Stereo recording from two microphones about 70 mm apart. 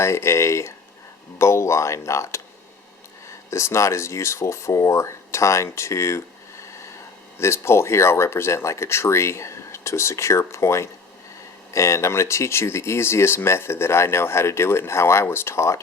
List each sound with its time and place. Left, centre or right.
0.0 s speech: left
7.3 s speech: left